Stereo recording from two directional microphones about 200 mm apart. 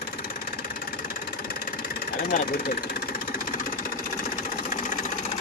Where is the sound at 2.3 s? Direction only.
45° left (ahead or behind).